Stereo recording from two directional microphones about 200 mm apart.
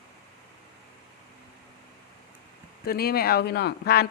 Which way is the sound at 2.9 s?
50° left (ahead or behind).